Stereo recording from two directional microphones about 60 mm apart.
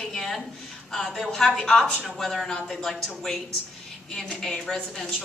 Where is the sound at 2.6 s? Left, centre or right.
Centre.